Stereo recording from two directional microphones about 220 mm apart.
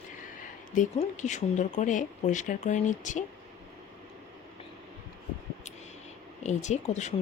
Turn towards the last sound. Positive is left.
turn(degrees=30)  # may be behind; listen again after turning